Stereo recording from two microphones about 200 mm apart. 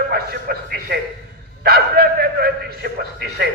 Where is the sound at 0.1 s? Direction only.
50° right (ahead or behind).